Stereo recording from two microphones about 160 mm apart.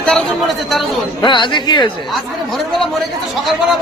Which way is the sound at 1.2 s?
30° left (ahead or behind).